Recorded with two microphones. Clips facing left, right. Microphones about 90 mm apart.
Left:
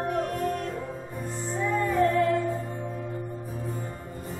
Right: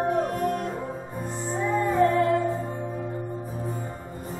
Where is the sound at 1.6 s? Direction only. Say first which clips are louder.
Right 2 dB; 25° right (ahead or behind).